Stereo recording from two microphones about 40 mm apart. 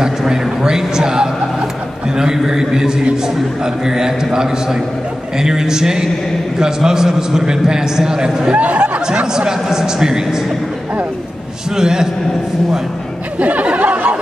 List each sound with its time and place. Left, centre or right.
0.0 s a man's voice: centre
8.5 s a sound: right
9.0 s speech: right
9.5 s a man's voice: centre
11.7 s a man's voice: centre
13.4 s music: right